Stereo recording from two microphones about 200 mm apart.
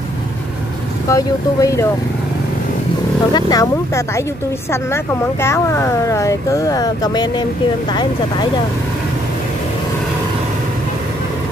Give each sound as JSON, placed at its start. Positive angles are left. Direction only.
{"t": 1.0, "sound": "speech", "side_deg": 15}
{"t": 3.3, "sound": "speech", "side_deg": 20}